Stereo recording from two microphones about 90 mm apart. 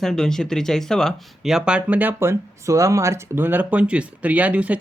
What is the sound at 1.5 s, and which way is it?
Speech, 10° right (ahead or behind).